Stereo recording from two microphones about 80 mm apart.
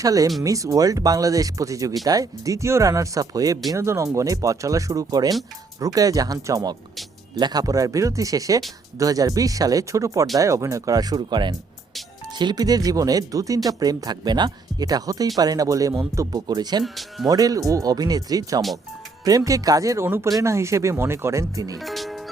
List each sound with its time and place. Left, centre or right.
0.0 s speech: right
3.7 s speech: right
11.2 s speech: right
16.8 s speech: centre
17.2 s speech: right
21.8 s music: centre